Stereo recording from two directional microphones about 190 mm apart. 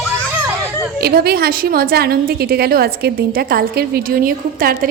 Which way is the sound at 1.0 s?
55° right (ahead or behind).